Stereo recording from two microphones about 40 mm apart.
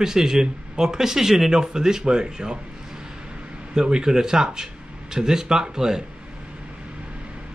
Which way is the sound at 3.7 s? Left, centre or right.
Centre.